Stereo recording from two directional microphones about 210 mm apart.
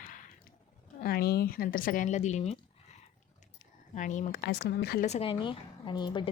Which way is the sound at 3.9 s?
35° left (ahead or behind).